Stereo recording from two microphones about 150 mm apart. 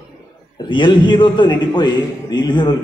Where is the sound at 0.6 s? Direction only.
35° left (ahead or behind).